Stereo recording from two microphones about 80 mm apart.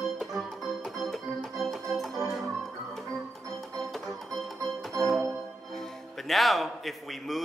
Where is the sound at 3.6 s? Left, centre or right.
Centre.